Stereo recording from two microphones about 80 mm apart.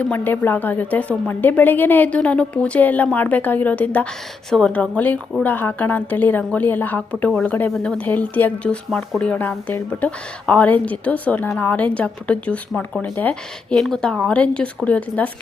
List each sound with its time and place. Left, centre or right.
0.0 s a woman's voice: left
8.0 s speech: left
10.0 s a woman's voice: centre
13.7 s a woman's voice: centre